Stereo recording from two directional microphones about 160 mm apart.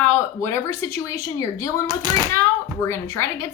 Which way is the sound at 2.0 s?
25° right (ahead or behind).